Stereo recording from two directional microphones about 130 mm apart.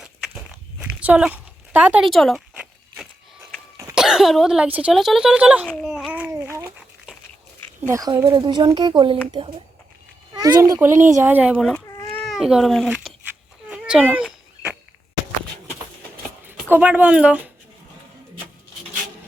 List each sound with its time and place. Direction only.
0.0 s walk: 5° right (ahead or behind)
2.0 s speech: centre (ahead or behind)
2.6 s a sound: 10° right (ahead or behind)
3.9 s speech: 5° right (ahead or behind)
5.8 s babbling: 5° right (ahead or behind)
6.3 s a sound: 20° right (ahead or behind)
6.7 s a sound: 10° right (ahead or behind)
7.8 s speech: 25° right (ahead or behind)
8.3 s speech: 35° right (ahead or behind)
10.3 s a child's voice: 30° right (ahead or behind); by 13.1 s centre (ahead or behind)
13.7 s cat: 10° right (ahead or behind)
16.6 s speech: 15° right (ahead or behind)